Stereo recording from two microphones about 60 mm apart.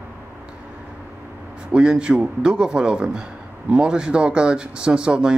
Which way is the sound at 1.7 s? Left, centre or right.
Centre.